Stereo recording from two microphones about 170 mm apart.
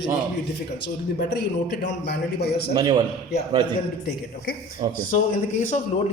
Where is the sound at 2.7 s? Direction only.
25° right (ahead or behind).